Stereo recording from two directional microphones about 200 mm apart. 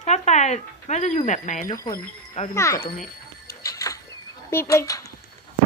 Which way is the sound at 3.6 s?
15° left (ahead or behind).